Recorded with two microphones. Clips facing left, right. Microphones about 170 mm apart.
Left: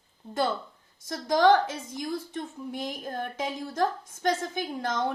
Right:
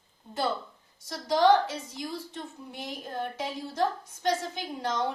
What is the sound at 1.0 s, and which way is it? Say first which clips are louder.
A woman's voice: left 1 dB; 50° left (ahead or behind).